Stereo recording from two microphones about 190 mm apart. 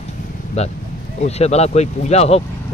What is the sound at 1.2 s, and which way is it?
Speech, 35° left (ahead or behind).